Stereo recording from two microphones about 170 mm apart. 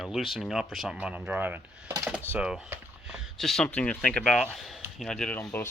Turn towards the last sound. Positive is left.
turn(degrees=15)  # may be behind; listen again after turning